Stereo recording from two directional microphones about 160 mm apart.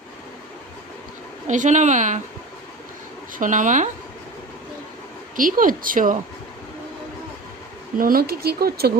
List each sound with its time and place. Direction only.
1.5 s a woman's voice: 50° right (ahead or behind)
3.3 s a woman's voice: 55° right (ahead or behind)
5.4 s speech: 60° right (ahead or behind)
7.9 s speech: 65° right (ahead or behind)